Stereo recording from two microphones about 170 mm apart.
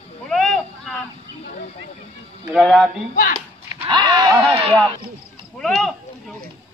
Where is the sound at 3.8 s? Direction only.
20° right (ahead or behind).